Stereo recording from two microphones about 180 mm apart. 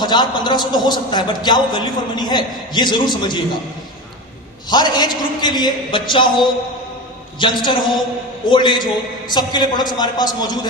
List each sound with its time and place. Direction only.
0.0 s a man's voice: 25° left (ahead or behind)
4.7 s a man's voice: 25° left (ahead or behind)